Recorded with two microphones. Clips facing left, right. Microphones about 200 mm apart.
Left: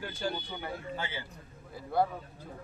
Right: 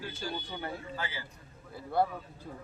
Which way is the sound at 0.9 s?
25° left (ahead or behind).